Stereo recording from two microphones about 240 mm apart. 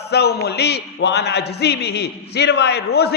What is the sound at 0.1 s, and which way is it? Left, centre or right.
A man's voice, left.